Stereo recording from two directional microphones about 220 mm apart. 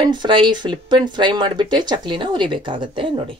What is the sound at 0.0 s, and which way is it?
Speech, 20° right (ahead or behind).